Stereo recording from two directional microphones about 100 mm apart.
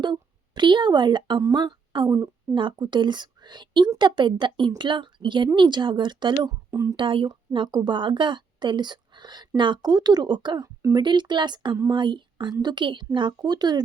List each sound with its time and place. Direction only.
0.0 s speech: 50° right (ahead or behind)
2.0 s a woman's voice: 30° right (ahead or behind)
2.6 s a woman's voice: 50° right (ahead or behind)
6.7 s speech: 30° right (ahead or behind)
6.9 s a woman's voice: 55° right (ahead or behind)